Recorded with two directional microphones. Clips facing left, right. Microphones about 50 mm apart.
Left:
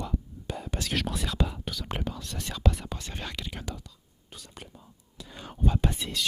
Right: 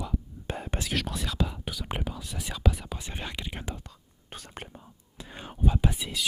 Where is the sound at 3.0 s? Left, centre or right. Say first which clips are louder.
Even; centre.